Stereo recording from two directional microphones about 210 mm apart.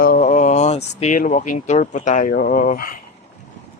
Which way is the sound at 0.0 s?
40° left (ahead or behind).